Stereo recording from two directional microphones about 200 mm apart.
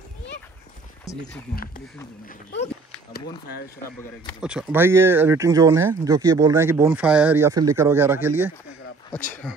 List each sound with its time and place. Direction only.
1.0 s speech: 15° left (ahead or behind)
4.4 s speech: 5° right (ahead or behind)